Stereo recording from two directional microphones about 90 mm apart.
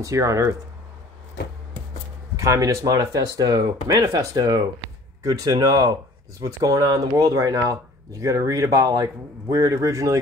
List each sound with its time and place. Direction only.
0.0 s speech: 35° right (ahead or behind)
2.3 s speech: 35° right (ahead or behind)